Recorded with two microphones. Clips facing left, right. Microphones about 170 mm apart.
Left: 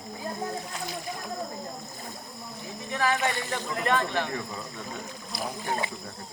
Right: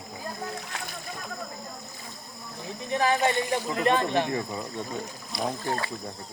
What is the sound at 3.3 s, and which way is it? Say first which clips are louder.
Speech: right 5 dB; 15° right (ahead or behind).